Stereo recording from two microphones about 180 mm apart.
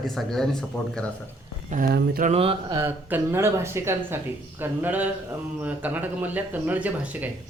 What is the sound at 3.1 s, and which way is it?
A man's voice, 15° right (ahead or behind).